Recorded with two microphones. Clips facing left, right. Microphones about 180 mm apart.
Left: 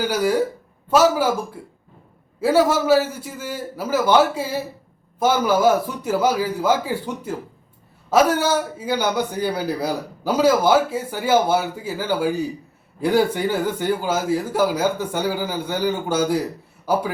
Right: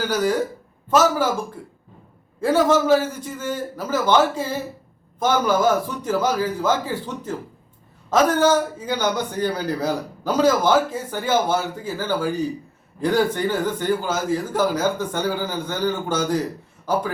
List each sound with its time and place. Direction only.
0.0 s a man's voice: 10° left (ahead or behind)